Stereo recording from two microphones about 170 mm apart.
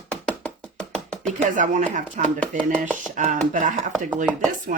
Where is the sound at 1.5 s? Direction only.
50° right (ahead or behind).